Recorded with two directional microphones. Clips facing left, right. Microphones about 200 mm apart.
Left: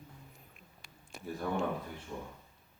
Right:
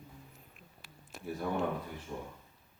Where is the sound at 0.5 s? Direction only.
Centre (ahead or behind).